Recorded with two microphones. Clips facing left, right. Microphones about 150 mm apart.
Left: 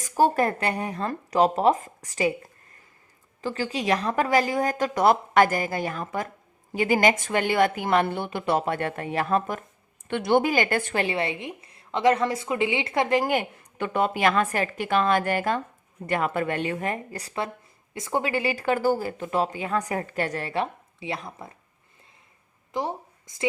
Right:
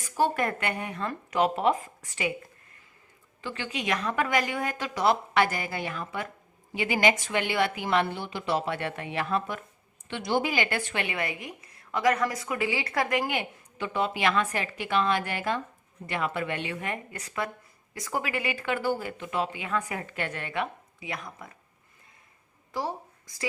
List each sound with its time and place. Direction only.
0.0 s speech: 40° left (ahead or behind)
3.4 s speech: 40° left (ahead or behind)
10.1 s speech: 55° left (ahead or behind)
11.0 s a woman's voice: 30° left (ahead or behind)
13.6 s speech: 55° left (ahead or behind); by 21.5 s 30° left (ahead or behind)
22.7 s speech: 20° left (ahead or behind)